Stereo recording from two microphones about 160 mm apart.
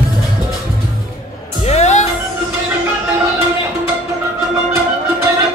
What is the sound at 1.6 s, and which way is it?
Music, 45° left (ahead or behind).